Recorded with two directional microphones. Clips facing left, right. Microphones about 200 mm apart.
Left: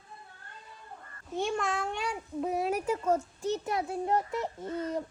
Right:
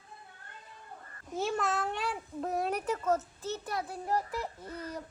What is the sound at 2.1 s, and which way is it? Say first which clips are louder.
A child's voice: left 2 dB; centre (ahead or behind).